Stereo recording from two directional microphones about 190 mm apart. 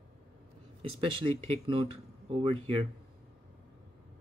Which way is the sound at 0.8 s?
25° right (ahead or behind).